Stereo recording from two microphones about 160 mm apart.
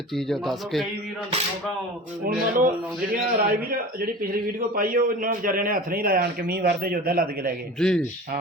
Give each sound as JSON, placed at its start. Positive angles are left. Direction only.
{"t": 0.3, "sound": "speech", "side_deg": 0}
{"t": 2.2, "sound": "a man's voice", "side_deg": -60}
{"t": 7.8, "sound": "speech", "side_deg": 5}